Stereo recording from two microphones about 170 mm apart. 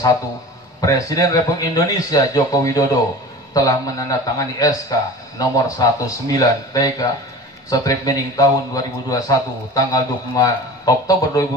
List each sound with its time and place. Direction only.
0.7 s a man's voice: 20° left (ahead or behind)